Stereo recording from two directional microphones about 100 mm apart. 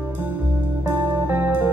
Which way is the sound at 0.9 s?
20° right (ahead or behind).